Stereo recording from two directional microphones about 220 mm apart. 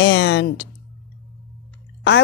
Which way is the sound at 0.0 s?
60° left (ahead or behind).